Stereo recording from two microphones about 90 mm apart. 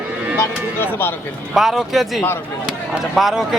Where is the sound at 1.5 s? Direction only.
Centre (ahead or behind).